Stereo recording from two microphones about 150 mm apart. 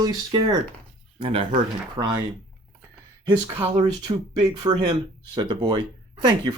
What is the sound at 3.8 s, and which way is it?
Speech, 30° right (ahead or behind).